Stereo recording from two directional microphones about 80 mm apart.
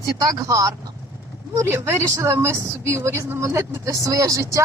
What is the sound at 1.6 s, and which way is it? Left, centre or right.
Speech, right.